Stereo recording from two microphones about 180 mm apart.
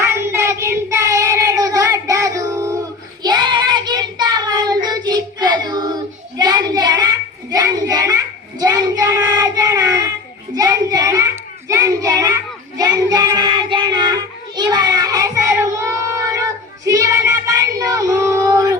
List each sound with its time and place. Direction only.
0.0 s child singing: 15° right (ahead or behind)